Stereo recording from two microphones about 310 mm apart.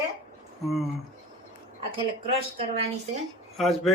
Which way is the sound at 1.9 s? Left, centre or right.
Centre.